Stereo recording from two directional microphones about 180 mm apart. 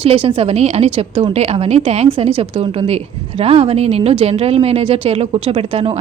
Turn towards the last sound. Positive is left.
turn(degrees=-35)  # may be behind; listen again after turning